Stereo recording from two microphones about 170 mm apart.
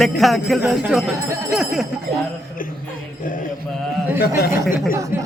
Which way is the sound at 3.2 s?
55° left (ahead or behind).